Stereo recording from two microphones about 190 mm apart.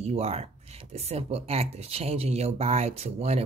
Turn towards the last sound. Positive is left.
turn(degrees=-35)  # may be behind; listen again after turning